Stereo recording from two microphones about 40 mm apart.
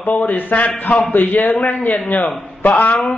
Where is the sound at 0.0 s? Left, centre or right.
Left.